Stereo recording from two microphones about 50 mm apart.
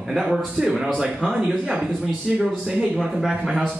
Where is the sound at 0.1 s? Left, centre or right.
Centre.